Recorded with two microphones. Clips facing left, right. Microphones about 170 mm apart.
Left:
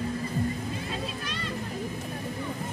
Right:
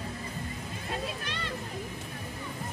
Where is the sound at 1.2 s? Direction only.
65° right (ahead or behind).